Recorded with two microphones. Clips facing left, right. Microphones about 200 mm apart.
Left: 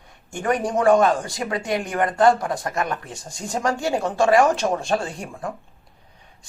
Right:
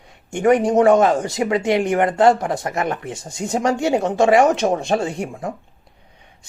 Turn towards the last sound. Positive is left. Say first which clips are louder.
# right 6 dB
turn(degrees=-20)  # may be behind; listen again after turning